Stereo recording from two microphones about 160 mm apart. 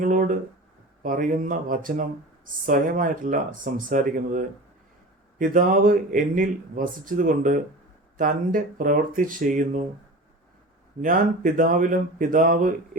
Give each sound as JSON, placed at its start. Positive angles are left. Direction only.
{"t": 0.0, "sound": "speech", "side_deg": -55}
{"t": 11.0, "sound": "speech", "side_deg": -60}